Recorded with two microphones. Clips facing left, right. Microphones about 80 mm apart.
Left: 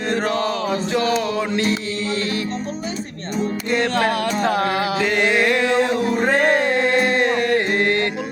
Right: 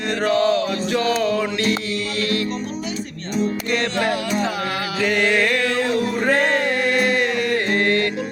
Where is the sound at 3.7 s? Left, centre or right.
Left.